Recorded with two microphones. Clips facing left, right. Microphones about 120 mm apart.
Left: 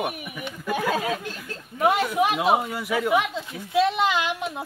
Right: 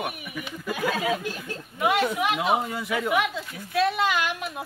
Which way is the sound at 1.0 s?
5° right (ahead or behind).